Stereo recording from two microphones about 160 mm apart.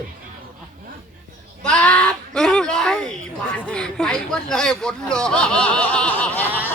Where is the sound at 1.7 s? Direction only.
5° left (ahead or behind).